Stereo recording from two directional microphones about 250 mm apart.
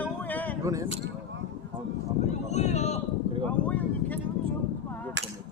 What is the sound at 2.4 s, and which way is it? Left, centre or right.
Speech, left.